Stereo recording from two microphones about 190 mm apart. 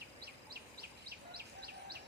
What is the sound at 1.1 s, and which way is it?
Bird, 55° right (ahead or behind).